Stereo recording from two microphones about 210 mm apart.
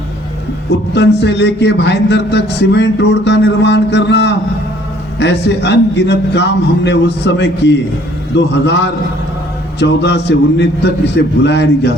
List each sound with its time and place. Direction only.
0.9 s a man's voice: 55° left (ahead or behind)